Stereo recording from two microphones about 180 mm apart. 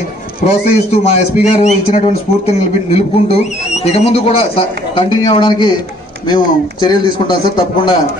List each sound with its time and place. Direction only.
0.5 s a man's voice: 35° left (ahead or behind)